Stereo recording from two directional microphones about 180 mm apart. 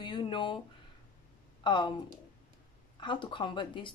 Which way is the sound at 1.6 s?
25° left (ahead or behind).